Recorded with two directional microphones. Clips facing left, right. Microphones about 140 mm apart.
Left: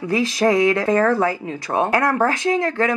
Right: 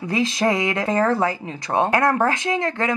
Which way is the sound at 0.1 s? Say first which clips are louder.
Left 3 dB; 20° right (ahead or behind).